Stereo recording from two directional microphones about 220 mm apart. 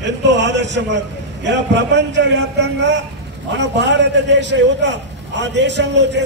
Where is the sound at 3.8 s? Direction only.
55° right (ahead or behind).